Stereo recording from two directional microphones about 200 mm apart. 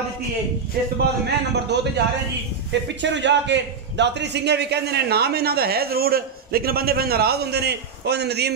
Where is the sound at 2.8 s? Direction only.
60° right (ahead or behind).